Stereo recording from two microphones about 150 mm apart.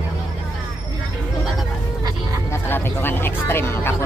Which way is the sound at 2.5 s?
15° left (ahead or behind).